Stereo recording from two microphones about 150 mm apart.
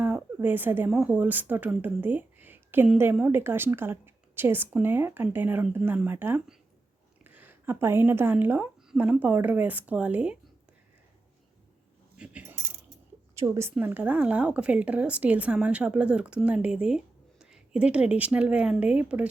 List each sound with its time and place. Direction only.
0.0 s a sound: 10° right (ahead or behind)
0.9 s a woman's voice: 5° right (ahead or behind)
12.1 s coin: 5° right (ahead or behind)
13.4 s speech: 20° right (ahead or behind)